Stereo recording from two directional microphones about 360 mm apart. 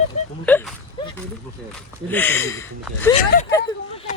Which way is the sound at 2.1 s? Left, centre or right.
Centre.